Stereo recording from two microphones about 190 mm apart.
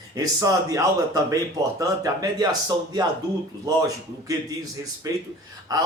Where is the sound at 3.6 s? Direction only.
20° right (ahead or behind).